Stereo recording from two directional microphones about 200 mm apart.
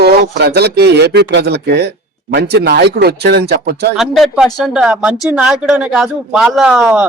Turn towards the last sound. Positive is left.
turn(degrees=-5)  # may be behind; listen again after turning